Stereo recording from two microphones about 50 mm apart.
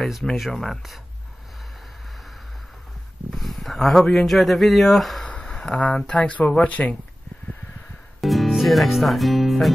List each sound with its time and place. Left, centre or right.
0.4 s speech: centre
3.3 s speech: centre
5.2 s speech: centre
8.2 s speech: centre